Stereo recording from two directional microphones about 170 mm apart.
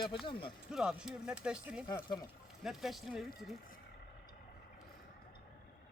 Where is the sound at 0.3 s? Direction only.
30° left (ahead or behind).